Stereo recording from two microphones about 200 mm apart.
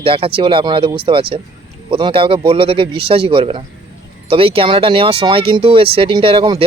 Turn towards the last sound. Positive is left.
turn(degrees=-25)  # may be behind; listen again after turning